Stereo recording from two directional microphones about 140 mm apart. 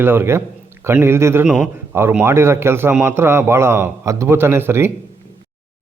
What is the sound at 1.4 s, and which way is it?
A man's voice, 5° right (ahead or behind).